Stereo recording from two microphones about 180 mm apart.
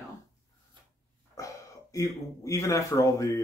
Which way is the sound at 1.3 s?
20° left (ahead or behind).